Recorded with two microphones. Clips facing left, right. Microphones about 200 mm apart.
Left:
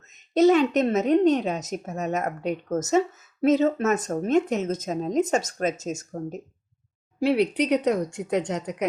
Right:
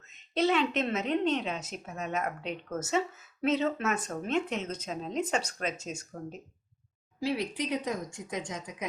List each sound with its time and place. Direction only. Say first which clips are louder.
0.1 s speech: left 9 dB; 45° left (ahead or behind)
7.2 s speech: left 10 dB; 70° left (ahead or behind)